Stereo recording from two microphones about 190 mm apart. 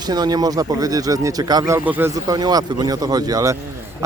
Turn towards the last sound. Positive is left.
turn(degrees=-20)  # may be behind; listen again after turning